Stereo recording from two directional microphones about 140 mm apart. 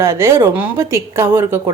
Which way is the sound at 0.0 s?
20° right (ahead or behind).